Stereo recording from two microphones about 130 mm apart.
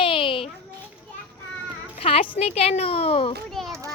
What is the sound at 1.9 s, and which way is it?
A woman's voice, 50° left (ahead or behind).